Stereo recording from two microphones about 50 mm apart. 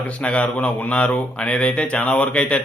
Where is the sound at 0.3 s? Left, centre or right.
Left.